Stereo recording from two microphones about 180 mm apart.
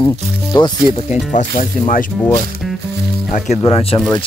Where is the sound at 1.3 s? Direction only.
45° left (ahead or behind).